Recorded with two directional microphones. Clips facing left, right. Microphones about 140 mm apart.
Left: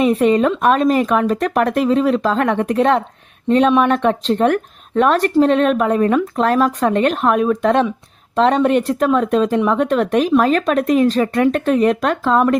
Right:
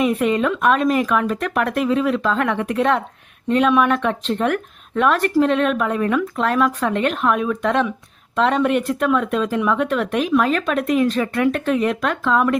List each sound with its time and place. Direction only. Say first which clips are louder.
0.0 s speech: left 4 dB; 30° left (ahead or behind)